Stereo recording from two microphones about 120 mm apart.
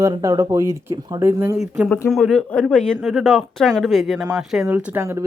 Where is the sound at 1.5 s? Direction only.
5° right (ahead or behind).